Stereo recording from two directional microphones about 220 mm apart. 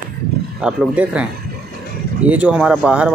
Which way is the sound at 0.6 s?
5° right (ahead or behind).